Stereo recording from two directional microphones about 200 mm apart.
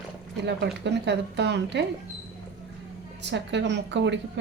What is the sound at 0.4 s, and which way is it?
A woman's voice, 60° right (ahead or behind).